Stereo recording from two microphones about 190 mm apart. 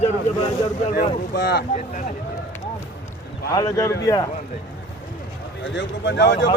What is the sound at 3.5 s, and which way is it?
Speech, 20° left (ahead or behind).